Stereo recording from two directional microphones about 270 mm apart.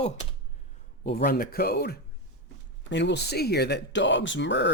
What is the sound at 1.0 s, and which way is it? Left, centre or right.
Speech, left.